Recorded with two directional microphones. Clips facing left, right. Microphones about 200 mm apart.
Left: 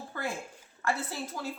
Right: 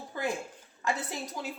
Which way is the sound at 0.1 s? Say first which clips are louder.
Right 4 dB; 15° right (ahead or behind).